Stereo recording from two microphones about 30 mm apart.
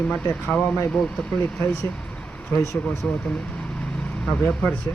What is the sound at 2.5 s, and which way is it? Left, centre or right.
Speech, left.